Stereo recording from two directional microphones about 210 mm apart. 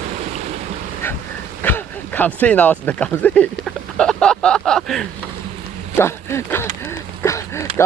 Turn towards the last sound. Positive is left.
turn(degrees=15)  # may be behind; listen again after turning